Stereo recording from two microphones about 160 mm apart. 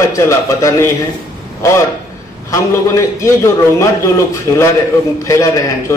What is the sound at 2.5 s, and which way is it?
A man's voice, 20° left (ahead or behind).